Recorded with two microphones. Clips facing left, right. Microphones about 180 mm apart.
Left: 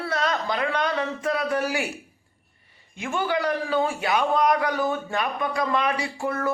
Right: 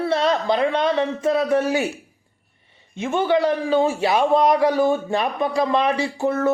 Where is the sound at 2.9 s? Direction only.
25° right (ahead or behind).